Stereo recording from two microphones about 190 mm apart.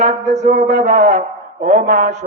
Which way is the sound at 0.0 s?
40° right (ahead or behind).